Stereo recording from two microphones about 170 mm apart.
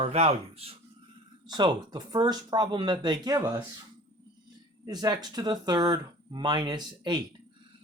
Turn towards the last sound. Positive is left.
turn(degrees=-25)  # may be behind; listen again after turning